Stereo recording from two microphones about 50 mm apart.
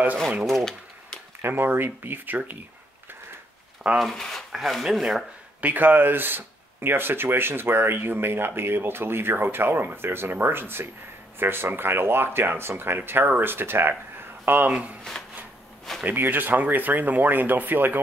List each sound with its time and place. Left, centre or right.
0.5 s a sound: centre
1.5 s speech: right
4.0 s speech: centre
4.6 s speech: centre
5.6 s speech: right
14.7 s speech: right
16.1 s speech: right